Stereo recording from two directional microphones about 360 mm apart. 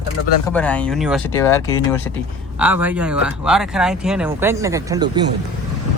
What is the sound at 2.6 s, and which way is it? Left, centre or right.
Speech, centre.